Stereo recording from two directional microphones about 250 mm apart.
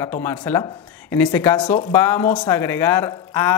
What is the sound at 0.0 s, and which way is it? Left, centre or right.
Speech, centre.